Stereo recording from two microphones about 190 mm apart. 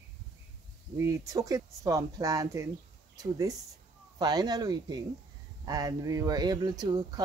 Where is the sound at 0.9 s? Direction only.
15° right (ahead or behind).